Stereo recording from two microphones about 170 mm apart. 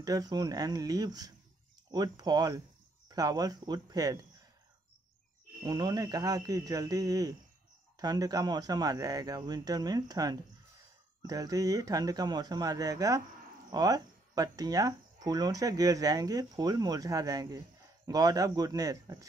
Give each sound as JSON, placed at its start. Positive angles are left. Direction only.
{"t": 0.0, "sound": "speech", "side_deg": -20}
{"t": 5.6, "sound": "speech", "side_deg": -20}